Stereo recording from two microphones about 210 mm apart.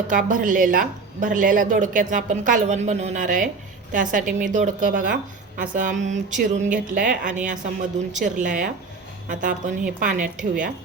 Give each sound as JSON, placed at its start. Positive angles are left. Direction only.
{"t": 0.1, "sound": "speech", "side_deg": -40}